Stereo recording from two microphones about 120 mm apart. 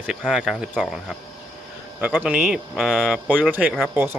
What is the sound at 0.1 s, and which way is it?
Speech, 5° right (ahead or behind).